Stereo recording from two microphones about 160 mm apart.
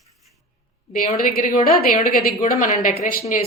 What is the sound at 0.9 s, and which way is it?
A woman's voice, 60° left (ahead or behind).